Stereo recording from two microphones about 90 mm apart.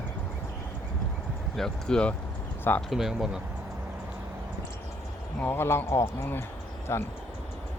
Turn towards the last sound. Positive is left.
turn(degrees=30)  # may be behind; listen again after turning